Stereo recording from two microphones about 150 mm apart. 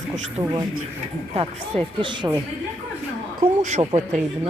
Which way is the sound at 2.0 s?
30° right (ahead or behind).